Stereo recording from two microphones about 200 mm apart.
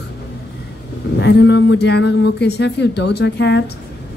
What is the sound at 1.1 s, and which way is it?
A woman's voice, 60° left (ahead or behind).